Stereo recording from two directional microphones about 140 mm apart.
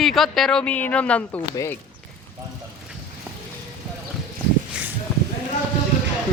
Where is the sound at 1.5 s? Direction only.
20° left (ahead or behind).